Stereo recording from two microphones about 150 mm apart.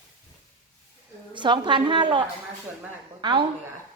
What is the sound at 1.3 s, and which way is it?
A woman's voice, 30° right (ahead or behind).